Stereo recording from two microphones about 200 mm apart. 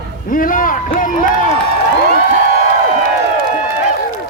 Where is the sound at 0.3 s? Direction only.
45° left (ahead or behind).